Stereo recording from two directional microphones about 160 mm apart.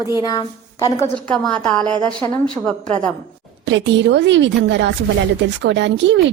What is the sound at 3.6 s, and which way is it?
A woman's voice, 90° right.